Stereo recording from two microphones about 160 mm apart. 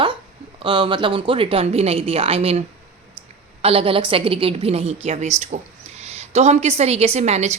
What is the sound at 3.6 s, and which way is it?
A woman's voice, 35° right (ahead or behind).